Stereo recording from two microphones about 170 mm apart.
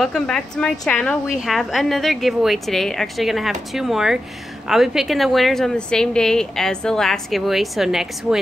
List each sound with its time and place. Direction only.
0.0 s a woman's voice: 5° left (ahead or behind)